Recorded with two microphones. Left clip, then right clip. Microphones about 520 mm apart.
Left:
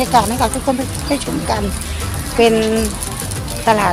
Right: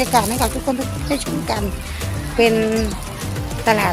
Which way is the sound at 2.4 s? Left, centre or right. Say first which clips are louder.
Left 3 dB; right.